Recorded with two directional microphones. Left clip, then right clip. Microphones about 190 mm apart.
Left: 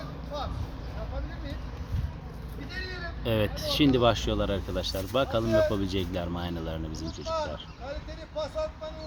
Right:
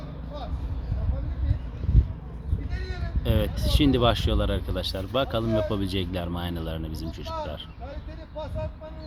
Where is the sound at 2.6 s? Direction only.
Centre (ahead or behind).